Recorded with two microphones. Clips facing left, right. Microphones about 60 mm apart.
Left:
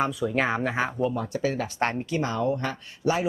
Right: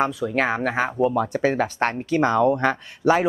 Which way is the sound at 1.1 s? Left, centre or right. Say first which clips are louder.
Right 7 dB; right.